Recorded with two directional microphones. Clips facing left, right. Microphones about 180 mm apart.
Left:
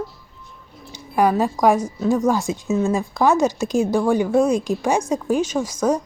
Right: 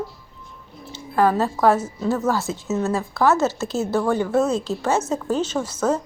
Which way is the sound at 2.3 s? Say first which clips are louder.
Left 3 dB; 15° left (ahead or behind).